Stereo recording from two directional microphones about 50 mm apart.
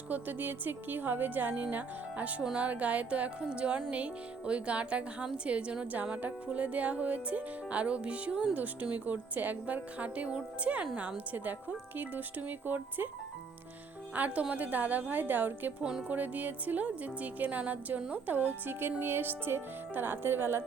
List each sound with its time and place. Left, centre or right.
0.1 s speech: right
2.6 s music: right
8.5 s speech: right
10.6 s music: right
11.3 s speech: right
14.1 s music: right
14.5 s speech: right
15.8 s music: centre
16.0 s speech: right